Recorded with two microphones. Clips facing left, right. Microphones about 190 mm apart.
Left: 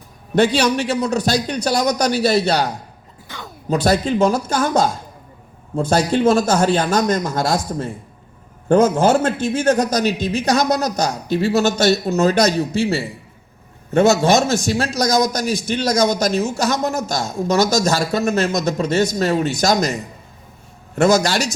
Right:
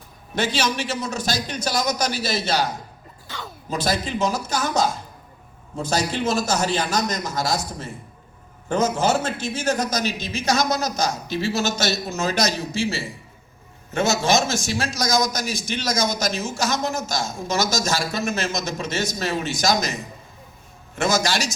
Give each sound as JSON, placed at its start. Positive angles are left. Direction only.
{"t": 0.3, "sound": "a man's voice", "side_deg": 60}
{"t": 3.8, "sound": "a man's voice", "side_deg": 55}
{"t": 20.9, "sound": "a man's voice", "side_deg": 60}